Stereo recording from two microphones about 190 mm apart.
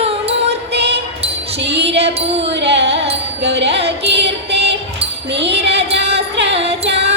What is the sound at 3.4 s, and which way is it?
Music, 60° right (ahead or behind).